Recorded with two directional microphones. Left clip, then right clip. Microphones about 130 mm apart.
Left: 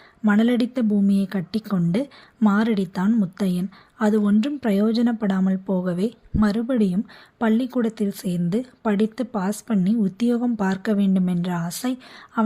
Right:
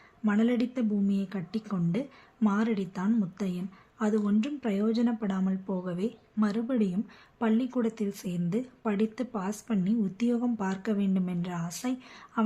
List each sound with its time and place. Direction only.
0.3 s speech: 55° left (ahead or behind)